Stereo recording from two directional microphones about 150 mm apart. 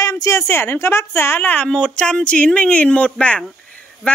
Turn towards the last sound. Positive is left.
turn(degrees=5)  # may be behind; listen again after turning